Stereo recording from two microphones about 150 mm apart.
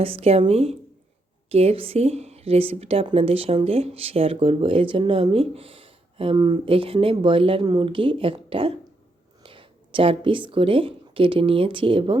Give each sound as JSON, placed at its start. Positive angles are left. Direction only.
{"t": 0.0, "sound": "a woman's voice", "side_deg": -40}